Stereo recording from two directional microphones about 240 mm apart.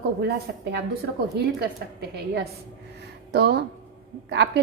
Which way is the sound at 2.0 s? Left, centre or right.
Right.